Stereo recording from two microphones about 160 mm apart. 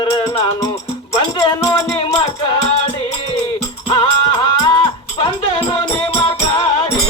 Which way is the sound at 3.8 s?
35° left (ahead or behind).